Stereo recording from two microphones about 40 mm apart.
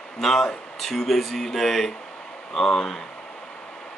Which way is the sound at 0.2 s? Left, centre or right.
Centre.